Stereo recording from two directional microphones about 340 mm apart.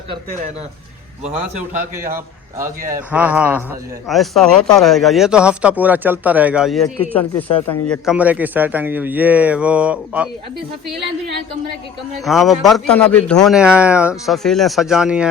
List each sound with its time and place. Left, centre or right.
2.0 s a man's voice: centre
12.2 s speech: centre